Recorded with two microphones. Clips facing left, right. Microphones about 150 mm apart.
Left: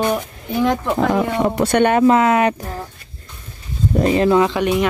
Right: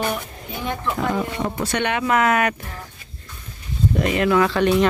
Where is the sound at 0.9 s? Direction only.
70° left (ahead or behind); by 2.0 s 50° left (ahead or behind).